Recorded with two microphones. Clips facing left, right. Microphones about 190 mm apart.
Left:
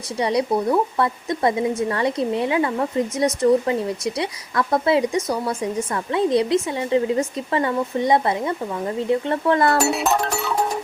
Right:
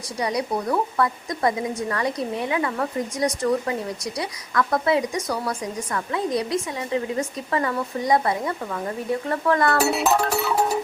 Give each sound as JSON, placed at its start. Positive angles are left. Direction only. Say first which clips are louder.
{"t": 0.2, "sound": "a woman's voice", "louder": "left 5 dB", "side_deg": 25}
{"t": 9.8, "sound": "music", "louder": "even", "side_deg": 0}